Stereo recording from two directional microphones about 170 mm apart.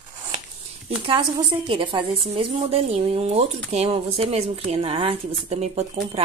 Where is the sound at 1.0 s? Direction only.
30° right (ahead or behind).